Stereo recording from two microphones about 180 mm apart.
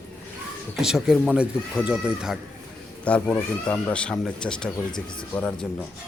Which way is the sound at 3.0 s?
10° left (ahead or behind).